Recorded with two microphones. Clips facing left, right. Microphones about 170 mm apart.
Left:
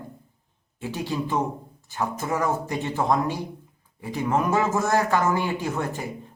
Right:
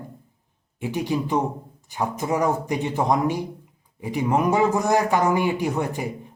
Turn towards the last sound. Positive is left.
turn(degrees=-15)  # may be behind; listen again after turning